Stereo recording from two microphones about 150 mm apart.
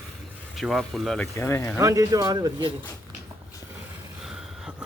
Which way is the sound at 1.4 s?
15° left (ahead or behind).